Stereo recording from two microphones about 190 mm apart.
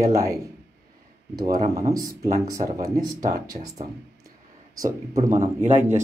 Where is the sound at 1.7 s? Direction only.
15° right (ahead or behind).